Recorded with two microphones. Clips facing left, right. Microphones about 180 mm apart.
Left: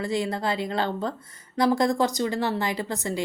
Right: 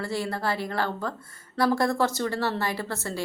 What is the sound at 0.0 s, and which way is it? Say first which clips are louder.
A woman's voice: left 2 dB; 15° left (ahead or behind).